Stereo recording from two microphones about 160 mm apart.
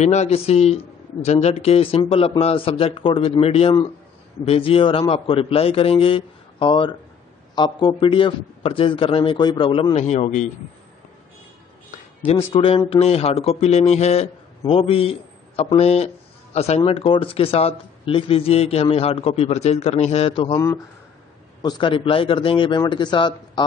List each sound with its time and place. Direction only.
0.0 s a man's voice: 45° left (ahead or behind)
12.5 s a man's voice: 35° left (ahead or behind)
20.5 s speech: 15° left (ahead or behind)
21.5 s a man's voice: 25° left (ahead or behind)